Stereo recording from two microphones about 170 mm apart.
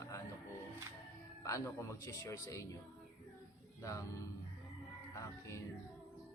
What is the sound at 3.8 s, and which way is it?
Speech, 20° left (ahead or behind).